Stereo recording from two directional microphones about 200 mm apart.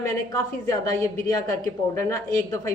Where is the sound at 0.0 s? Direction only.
15° left (ahead or behind).